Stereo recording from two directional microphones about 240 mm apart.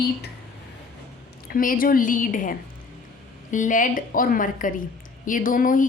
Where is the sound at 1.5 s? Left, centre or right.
Left.